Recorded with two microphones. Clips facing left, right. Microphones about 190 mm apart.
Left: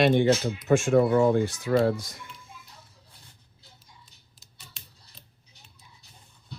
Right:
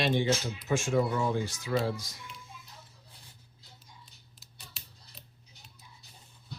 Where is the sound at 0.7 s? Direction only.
60° left (ahead or behind).